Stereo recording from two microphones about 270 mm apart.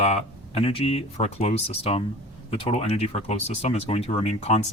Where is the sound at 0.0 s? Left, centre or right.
Left.